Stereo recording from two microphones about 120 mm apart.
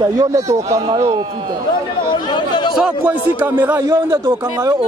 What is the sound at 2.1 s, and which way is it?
Chatter, 40° left (ahead or behind).